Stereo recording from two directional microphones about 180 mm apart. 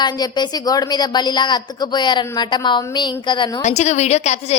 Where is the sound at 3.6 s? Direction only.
40° left (ahead or behind).